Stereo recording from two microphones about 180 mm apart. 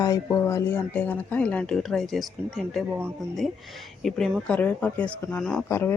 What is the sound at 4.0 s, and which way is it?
Speech, centre (ahead or behind).